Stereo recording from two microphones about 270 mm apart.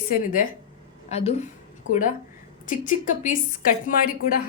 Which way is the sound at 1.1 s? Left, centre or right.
Left.